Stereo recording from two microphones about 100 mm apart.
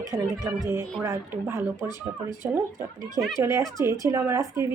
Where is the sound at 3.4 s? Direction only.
30° right (ahead or behind).